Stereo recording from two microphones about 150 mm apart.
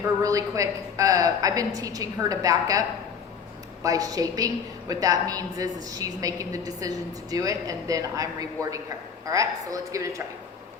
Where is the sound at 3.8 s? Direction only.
25° right (ahead or behind).